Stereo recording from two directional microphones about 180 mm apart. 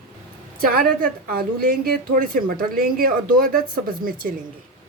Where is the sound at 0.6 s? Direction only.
55° right (ahead or behind).